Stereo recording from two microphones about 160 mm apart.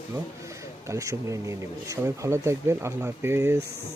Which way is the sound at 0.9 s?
20° right (ahead or behind).